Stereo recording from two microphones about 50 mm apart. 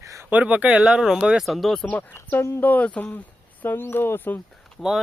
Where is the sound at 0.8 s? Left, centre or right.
Centre.